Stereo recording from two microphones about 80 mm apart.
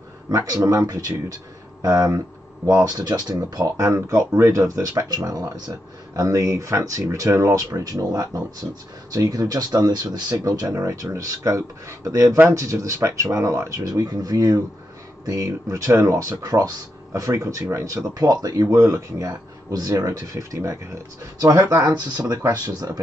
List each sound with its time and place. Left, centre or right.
0.3 s speech: right
10.8 s speech: right
18.1 s speech: right